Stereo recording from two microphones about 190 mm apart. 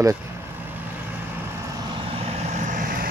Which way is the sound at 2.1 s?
35° right (ahead or behind).